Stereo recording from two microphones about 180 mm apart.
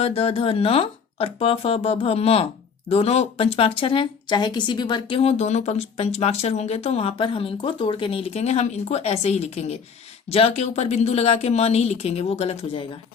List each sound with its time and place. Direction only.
0.0 s speech: 35° left (ahead or behind)